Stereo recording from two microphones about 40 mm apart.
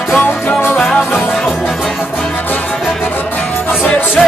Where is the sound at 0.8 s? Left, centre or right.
Centre.